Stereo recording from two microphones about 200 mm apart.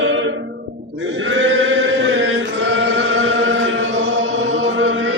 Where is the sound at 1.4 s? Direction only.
65° right (ahead or behind).